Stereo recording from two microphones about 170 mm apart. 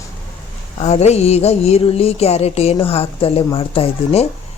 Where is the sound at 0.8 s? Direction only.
40° left (ahead or behind).